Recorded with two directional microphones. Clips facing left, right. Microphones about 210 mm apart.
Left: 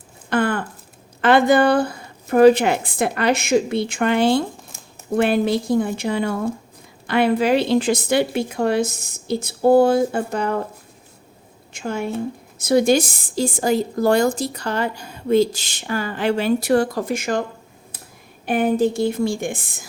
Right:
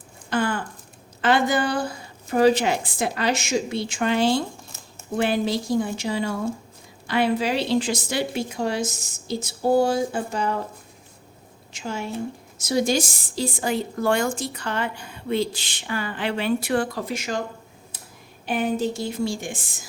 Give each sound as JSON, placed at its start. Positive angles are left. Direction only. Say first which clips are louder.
{"t": 0.3, "sound": "a woman's voice", "louder": "left 4 dB", "side_deg": 60}
{"t": 11.7, "sound": "a woman's voice", "louder": "left 5 dB", "side_deg": 55}
{"t": 18.4, "sound": "a woman's voice", "louder": "left 6 dB", "side_deg": 55}